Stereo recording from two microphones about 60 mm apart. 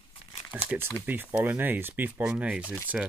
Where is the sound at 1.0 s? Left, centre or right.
Right.